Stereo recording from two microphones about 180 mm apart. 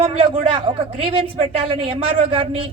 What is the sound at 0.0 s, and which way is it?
Speech, 30° right (ahead or behind).